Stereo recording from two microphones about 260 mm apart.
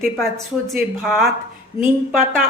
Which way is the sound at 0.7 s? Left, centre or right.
Centre.